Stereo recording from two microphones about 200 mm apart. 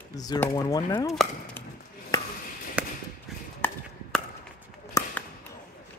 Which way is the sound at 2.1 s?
15° left (ahead or behind).